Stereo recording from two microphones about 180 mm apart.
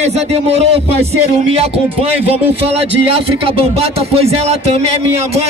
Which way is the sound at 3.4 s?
30° right (ahead or behind).